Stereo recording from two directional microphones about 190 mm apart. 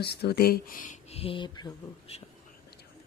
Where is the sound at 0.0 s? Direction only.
60° left (ahead or behind); by 2.1 s 25° left (ahead or behind).